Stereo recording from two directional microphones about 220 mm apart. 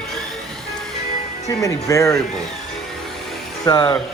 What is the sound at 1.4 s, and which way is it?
Speech, 15° left (ahead or behind).